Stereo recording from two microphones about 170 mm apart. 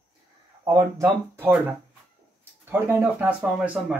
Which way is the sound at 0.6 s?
20° right (ahead or behind).